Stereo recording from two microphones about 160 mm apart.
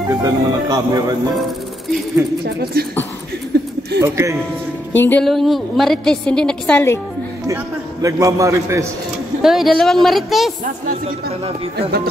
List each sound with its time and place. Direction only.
0.1 s speech: 20° right (ahead or behind)
2.4 s speech: 80° right
3.5 s a sound: 90° right
4.0 s speech: 15° right (ahead or behind)
5.0 s a woman's voice: 5° left (ahead or behind)
7.4 s a man's voice: 20° right (ahead or behind)
9.4 s a woman's voice: centre (ahead or behind)